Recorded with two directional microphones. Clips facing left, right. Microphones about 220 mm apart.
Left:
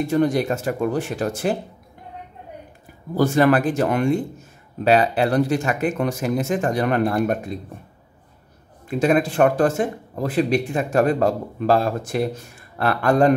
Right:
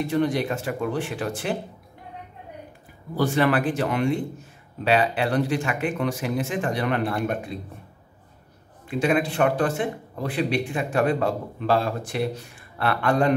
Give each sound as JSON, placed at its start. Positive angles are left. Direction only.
{"t": 0.1, "sound": "speech", "side_deg": 45}
{"t": 3.2, "sound": "speech", "side_deg": 45}
{"t": 8.8, "sound": "a man's voice", "side_deg": 45}